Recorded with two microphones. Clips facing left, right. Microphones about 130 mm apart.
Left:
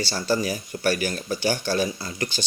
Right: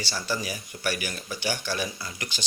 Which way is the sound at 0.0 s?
35° left (ahead or behind).